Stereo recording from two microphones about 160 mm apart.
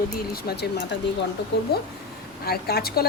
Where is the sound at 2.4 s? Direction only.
75° left (ahead or behind).